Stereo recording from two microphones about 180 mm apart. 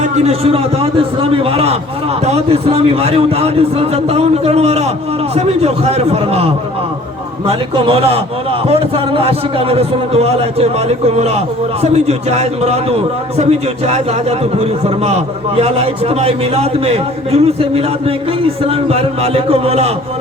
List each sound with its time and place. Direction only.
0.0 s a man's voice: 35° right (ahead or behind)